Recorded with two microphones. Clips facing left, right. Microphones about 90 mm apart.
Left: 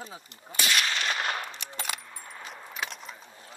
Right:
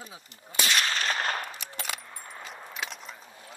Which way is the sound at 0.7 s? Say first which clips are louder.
Right 1 dB; 40° right (ahead or behind).